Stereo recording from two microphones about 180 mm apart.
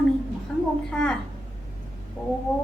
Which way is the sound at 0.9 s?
5° left (ahead or behind).